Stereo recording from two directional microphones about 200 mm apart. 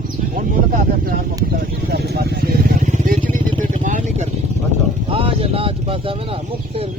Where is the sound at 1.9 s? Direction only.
55° right (ahead or behind).